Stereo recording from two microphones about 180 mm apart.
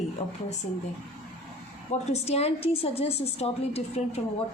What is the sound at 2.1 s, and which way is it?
A woman's voice, 35° left (ahead or behind).